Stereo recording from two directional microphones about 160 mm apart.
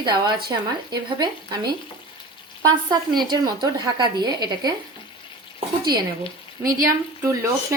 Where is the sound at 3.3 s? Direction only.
25° right (ahead or behind).